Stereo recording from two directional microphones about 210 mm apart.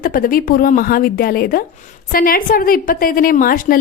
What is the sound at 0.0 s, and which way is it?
A woman's voice, 45° left (ahead or behind).